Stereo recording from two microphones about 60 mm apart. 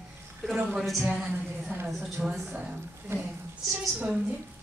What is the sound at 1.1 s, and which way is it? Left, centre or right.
A woman's voice, centre.